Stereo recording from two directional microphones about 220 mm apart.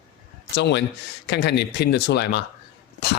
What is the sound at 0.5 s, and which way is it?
Speech, 50° left (ahead or behind).